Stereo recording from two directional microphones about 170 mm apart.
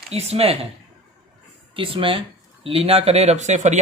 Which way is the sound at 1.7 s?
30° right (ahead or behind).